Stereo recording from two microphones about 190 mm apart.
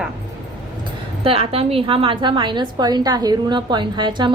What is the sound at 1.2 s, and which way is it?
A woman's voice, 30° right (ahead or behind).